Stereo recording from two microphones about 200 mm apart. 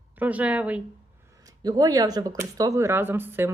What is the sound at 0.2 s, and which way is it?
Speech, 5° right (ahead or behind).